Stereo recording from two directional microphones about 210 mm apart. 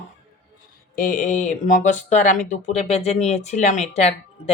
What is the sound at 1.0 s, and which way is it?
Speech, 40° left (ahead or behind).